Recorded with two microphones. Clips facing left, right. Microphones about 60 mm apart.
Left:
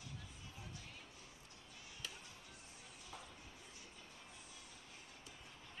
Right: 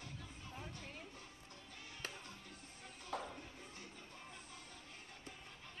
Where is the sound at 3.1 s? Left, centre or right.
Right.